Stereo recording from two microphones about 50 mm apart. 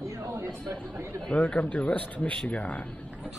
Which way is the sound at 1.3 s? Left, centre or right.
Left.